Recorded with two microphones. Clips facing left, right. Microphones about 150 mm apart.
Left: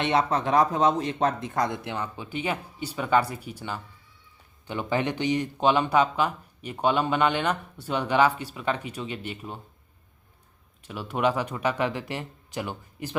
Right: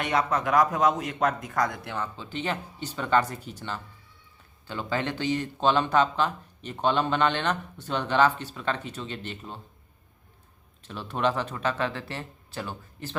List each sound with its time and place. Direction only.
0.0 s speech: 25° left (ahead or behind); by 9.6 s 10° left (ahead or behind)
10.8 s speech: 10° left (ahead or behind)